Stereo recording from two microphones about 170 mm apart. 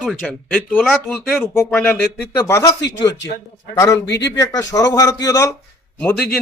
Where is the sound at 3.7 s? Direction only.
20° left (ahead or behind).